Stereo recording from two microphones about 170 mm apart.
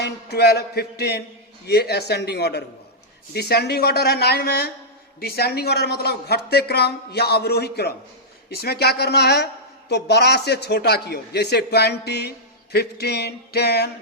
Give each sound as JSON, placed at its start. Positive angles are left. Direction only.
{"t": 0.0, "sound": "speech", "side_deg": 75}